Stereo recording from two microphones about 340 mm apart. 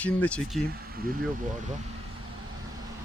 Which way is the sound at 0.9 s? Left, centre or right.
Right.